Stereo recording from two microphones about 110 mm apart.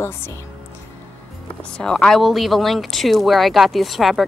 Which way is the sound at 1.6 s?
10° left (ahead or behind).